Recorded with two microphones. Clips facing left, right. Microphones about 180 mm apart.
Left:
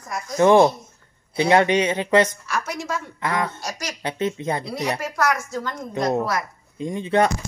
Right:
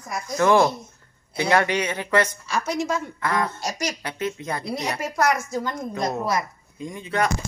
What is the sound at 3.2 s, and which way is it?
Speech, 20° left (ahead or behind).